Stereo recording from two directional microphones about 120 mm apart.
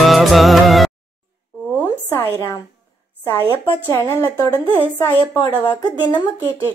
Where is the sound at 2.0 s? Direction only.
20° left (ahead or behind).